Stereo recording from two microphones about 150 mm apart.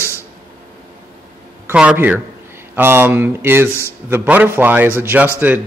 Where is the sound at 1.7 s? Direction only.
10° right (ahead or behind).